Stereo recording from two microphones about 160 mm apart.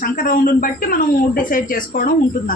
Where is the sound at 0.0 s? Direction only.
60° left (ahead or behind).